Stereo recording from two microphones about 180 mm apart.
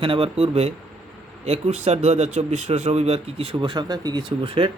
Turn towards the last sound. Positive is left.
turn(degrees=-30)  # may be behind; listen again after turning